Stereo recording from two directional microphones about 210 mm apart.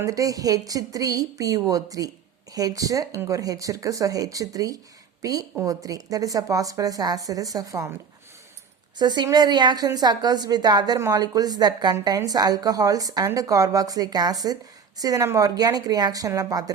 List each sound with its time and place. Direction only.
0.0 s a woman's voice: 15° right (ahead or behind)
9.0 s a woman's voice: 20° right (ahead or behind)